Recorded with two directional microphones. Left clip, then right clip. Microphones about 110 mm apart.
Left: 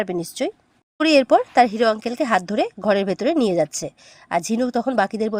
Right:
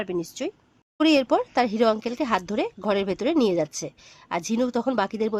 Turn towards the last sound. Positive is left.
turn(degrees=30)  # may be behind; listen again after turning